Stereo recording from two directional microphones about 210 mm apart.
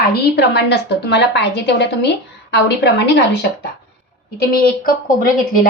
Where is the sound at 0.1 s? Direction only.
50° left (ahead or behind).